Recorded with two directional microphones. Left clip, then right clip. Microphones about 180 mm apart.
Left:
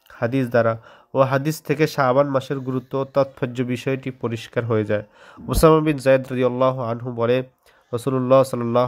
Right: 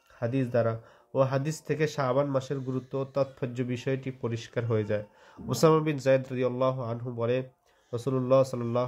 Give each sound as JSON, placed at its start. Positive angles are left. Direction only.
{"t": 0.2, "sound": "speech", "side_deg": 30}